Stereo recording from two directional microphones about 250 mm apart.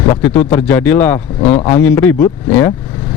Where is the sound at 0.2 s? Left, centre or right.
Centre.